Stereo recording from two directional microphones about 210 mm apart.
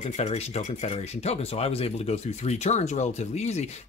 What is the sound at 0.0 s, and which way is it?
Speech, 30° left (ahead or behind).